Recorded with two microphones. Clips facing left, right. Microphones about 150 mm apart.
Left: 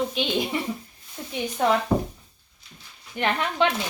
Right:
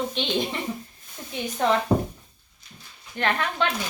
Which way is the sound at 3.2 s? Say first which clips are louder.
Left 2 dB; 15° left (ahead or behind).